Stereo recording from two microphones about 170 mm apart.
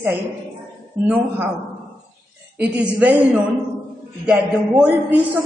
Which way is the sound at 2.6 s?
10° right (ahead or behind).